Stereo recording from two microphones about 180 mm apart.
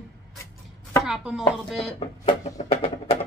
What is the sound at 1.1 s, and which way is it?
Speech, 5° right (ahead or behind).